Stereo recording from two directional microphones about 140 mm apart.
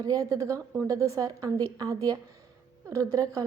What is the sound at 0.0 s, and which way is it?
A woman's voice, 25° right (ahead or behind).